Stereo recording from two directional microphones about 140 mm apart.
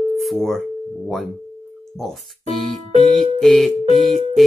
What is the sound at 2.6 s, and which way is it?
Music, centre (ahead or behind).